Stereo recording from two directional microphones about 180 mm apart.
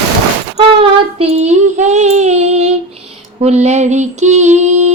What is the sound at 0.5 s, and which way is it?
Child singing, 35° right (ahead or behind).